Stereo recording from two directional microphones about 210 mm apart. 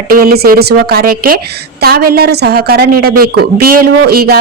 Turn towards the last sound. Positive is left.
turn(degrees=-45)  # may be behind; listen again after turning